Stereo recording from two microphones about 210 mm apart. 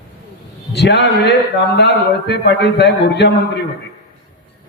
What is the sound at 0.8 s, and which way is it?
A man's voice, 55° left (ahead or behind).